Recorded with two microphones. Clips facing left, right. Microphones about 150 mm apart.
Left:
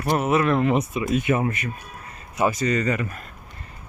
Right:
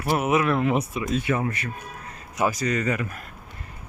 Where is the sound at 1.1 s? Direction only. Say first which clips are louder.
Left 3 dB; 20° left (ahead or behind).